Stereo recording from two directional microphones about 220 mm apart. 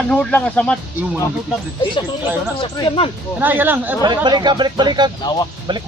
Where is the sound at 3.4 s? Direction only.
10° right (ahead or behind).